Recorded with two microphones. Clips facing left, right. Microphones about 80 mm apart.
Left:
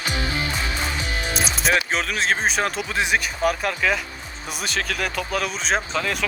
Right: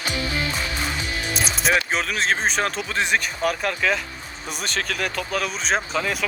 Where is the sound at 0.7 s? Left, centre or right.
Left.